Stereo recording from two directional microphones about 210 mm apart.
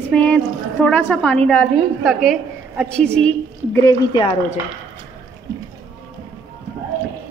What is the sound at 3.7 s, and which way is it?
Speech, 15° left (ahead or behind).